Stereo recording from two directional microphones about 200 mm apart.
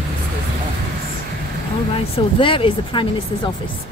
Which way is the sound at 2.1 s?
25° left (ahead or behind).